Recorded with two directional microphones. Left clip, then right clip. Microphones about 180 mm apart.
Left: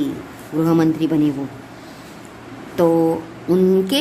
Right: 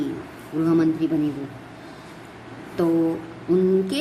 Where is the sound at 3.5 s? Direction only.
45° left (ahead or behind).